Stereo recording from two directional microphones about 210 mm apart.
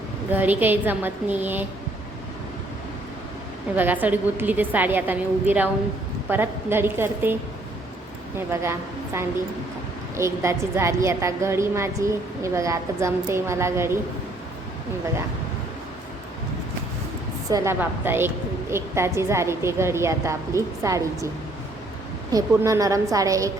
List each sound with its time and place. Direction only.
0.3 s a woman's voice: 10° right (ahead or behind)
3.8 s a woman's voice: 10° right (ahead or behind)
10.2 s a woman's voice: 15° right (ahead or behind)
17.5 s a woman's voice: 15° right (ahead or behind)
22.3 s a woman's voice: 15° right (ahead or behind)